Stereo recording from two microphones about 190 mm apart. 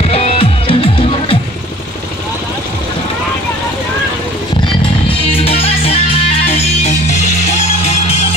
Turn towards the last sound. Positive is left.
turn(degrees=35)  # may be behind; listen again after turning